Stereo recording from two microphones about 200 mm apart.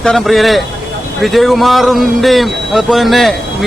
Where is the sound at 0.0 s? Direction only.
Centre (ahead or behind).